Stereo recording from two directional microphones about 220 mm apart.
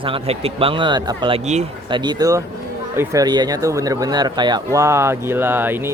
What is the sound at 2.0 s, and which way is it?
Speech, 15° right (ahead or behind).